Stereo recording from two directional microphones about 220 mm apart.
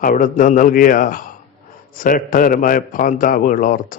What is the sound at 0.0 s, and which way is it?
A man's voice, 40° left (ahead or behind).